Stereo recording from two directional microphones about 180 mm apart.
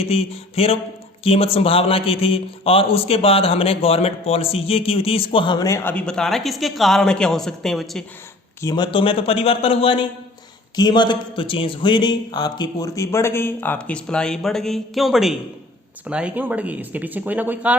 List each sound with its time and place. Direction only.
0.0 s a man's voice: 35° left (ahead or behind); by 8.0 s centre (ahead or behind)
8.6 s a man's voice: 25° left (ahead or behind); by 17.7 s 10° right (ahead or behind)